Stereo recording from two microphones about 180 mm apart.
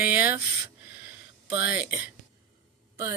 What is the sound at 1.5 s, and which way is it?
Speech, 10° right (ahead or behind).